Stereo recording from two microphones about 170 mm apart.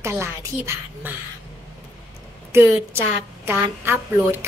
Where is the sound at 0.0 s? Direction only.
15° right (ahead or behind).